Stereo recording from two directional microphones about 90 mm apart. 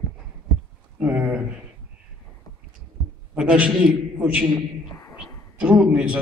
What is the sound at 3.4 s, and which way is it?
A man's voice, 10° right (ahead or behind).